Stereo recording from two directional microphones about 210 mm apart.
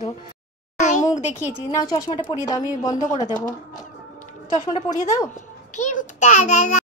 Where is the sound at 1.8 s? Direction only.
20° left (ahead or behind).